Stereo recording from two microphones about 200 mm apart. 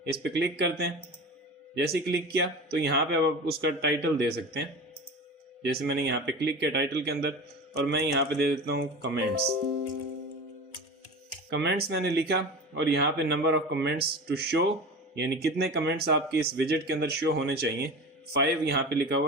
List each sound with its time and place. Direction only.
0.0 s speech: 55° right (ahead or behind)
5.6 s speech: 55° right (ahead or behind)
11.4 s speech: 55° right (ahead or behind)